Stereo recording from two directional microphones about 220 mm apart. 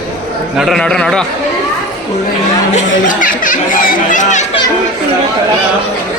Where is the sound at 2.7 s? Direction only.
35° left (ahead or behind).